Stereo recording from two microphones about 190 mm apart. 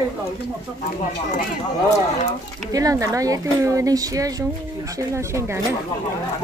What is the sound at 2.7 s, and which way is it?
Speech, 20° right (ahead or behind).